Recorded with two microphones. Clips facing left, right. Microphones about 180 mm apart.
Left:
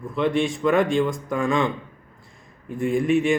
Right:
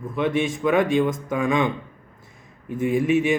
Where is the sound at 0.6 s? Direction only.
10° right (ahead or behind).